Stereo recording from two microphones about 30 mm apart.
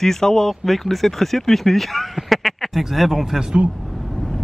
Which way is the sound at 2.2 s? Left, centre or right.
Centre.